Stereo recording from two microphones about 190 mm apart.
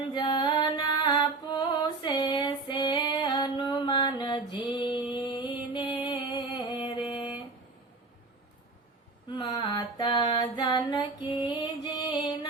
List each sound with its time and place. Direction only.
0.1 s music: 25° left (ahead or behind)
9.3 s female singing: 25° left (ahead or behind)